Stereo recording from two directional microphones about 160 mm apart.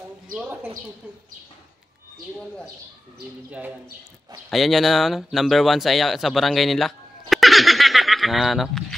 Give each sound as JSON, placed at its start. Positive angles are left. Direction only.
{"t": 0.3, "sound": "speech", "side_deg": -10}
{"t": 4.5, "sound": "speech", "side_deg": 0}